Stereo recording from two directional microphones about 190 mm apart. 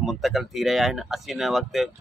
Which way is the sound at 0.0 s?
Centre (ahead or behind).